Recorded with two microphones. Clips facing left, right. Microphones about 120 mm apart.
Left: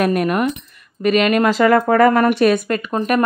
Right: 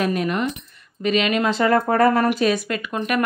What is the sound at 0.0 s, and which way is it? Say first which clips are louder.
Speech: left 5 dB; 55° left (ahead or behind).